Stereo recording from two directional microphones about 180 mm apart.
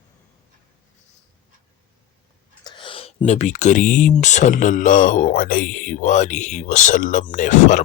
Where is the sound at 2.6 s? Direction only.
25° left (ahead or behind).